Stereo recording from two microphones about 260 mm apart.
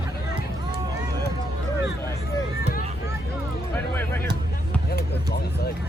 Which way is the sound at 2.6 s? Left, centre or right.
Left.